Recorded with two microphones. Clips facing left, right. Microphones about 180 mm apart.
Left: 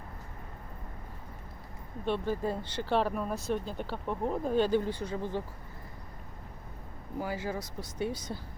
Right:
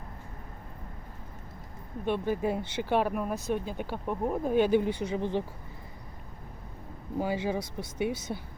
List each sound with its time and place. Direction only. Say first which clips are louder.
2.0 s speech: right 2 dB; 15° right (ahead or behind)
7.2 s speech: right 5 dB; 20° right (ahead or behind)